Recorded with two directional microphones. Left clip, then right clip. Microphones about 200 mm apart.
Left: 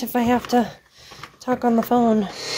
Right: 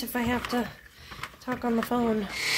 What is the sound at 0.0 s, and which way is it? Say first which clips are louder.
Speech: left 8 dB; 45° left (ahead or behind).